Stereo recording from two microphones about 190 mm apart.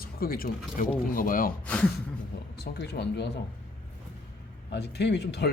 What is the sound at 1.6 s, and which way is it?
Speech, 5° left (ahead or behind).